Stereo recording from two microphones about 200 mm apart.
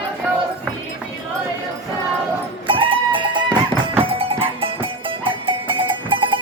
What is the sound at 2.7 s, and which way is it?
Music, 25° right (ahead or behind).